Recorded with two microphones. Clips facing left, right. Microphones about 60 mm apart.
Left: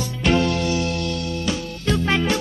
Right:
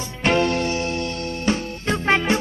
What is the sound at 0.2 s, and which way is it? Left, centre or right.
Music, right.